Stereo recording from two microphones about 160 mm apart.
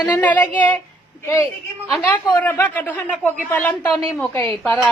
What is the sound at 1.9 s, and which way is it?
A man's voice, 10° left (ahead or behind).